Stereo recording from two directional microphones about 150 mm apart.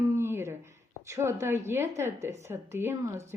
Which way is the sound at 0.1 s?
15° right (ahead or behind).